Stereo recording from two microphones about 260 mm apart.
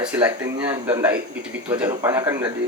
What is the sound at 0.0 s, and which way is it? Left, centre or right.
A man's voice, centre.